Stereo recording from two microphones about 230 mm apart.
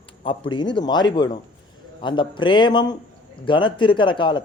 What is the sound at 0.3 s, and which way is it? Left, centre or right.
A man's voice, left.